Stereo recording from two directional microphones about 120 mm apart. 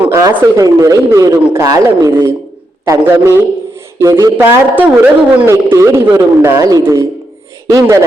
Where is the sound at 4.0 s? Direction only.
25° right (ahead or behind).